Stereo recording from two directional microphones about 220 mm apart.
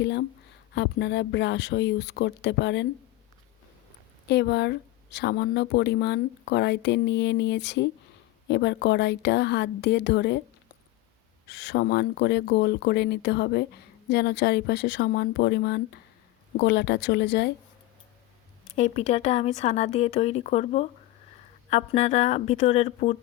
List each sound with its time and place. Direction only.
0.0 s speech: 50° left (ahead or behind)
4.3 s speech: 50° left (ahead or behind)
11.4 s speech: 45° left (ahead or behind)
18.8 s speech: 30° left (ahead or behind)